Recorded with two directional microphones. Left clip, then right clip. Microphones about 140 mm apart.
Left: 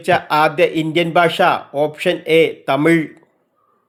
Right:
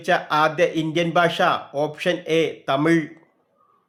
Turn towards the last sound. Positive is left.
turn(degrees=30)  # may be behind; listen again after turning